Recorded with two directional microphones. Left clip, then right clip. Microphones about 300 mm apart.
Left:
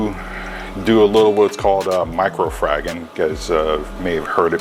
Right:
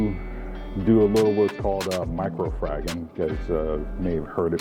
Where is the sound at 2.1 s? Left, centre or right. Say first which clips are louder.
Left 10 dB; centre.